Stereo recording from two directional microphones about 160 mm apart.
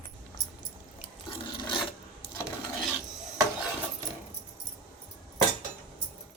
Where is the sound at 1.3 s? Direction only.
30° left (ahead or behind).